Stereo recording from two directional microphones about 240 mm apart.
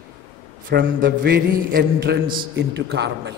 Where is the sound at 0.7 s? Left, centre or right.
Right.